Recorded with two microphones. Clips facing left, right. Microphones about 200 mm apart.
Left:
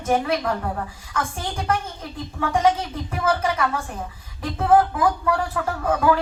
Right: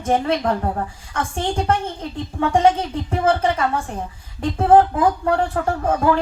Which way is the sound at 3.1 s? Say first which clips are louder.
Right 4 dB; 30° right (ahead or behind).